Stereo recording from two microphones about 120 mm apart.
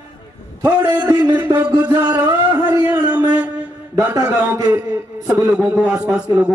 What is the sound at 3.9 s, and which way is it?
Speech, 30° right (ahead or behind).